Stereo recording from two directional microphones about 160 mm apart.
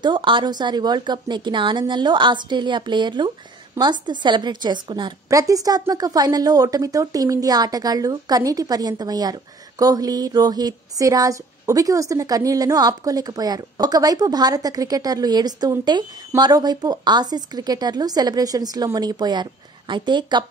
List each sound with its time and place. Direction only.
0.0 s a woman's voice: 30° right (ahead or behind)